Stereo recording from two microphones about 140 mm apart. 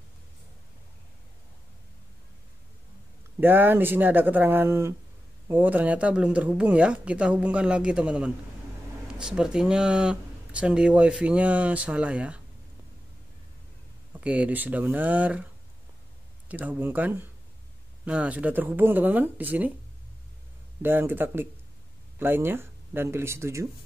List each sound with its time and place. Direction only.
3.3 s speech: 15° right (ahead or behind)
14.1 s speech: 10° right (ahead or behind)
16.4 s speech: 10° right (ahead or behind)
20.8 s speech: 15° right (ahead or behind)